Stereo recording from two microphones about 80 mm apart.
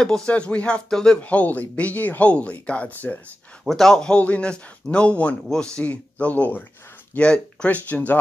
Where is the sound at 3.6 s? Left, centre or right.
Centre.